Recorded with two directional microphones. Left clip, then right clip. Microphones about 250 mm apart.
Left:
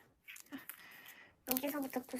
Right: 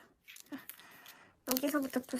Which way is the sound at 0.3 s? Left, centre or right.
Centre.